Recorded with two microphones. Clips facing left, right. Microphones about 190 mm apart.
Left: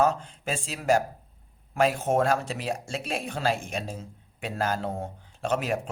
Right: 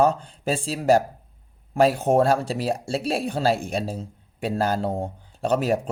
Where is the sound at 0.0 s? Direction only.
35° right (ahead or behind).